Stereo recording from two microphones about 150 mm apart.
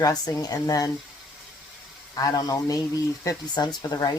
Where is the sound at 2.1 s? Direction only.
25° left (ahead or behind).